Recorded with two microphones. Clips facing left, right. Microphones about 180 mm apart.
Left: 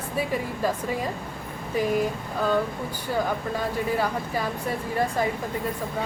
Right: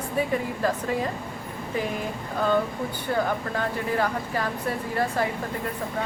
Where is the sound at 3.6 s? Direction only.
10° left (ahead or behind).